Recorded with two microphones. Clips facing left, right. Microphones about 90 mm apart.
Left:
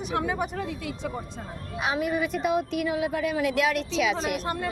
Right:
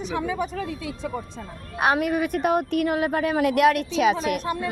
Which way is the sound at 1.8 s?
65° right (ahead or behind).